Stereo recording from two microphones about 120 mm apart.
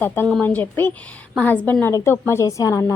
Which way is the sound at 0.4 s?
15° left (ahead or behind).